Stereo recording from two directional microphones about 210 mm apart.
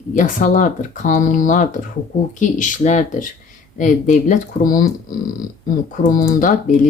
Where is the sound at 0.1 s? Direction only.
35° left (ahead or behind).